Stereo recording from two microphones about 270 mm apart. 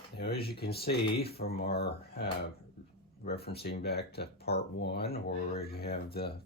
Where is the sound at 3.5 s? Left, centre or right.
Left.